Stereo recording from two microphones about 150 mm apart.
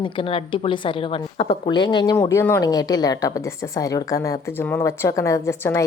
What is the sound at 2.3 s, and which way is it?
A woman's voice, 15° left (ahead or behind).